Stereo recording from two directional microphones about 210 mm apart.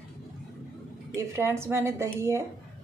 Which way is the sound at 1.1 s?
10° right (ahead or behind).